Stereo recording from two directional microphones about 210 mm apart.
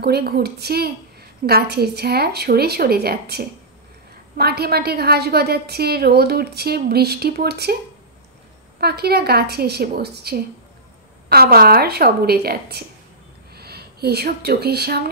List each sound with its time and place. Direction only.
0.0 s a woman's voice: 50° right (ahead or behind)
8.7 s a woman's voice: 50° right (ahead or behind)